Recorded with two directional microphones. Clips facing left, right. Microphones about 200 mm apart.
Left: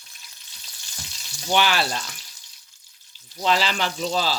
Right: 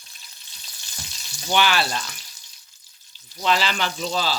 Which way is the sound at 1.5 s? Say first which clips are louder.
Even; 35° left (ahead or behind).